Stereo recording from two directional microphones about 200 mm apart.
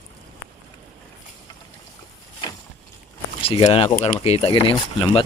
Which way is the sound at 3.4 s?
30° left (ahead or behind).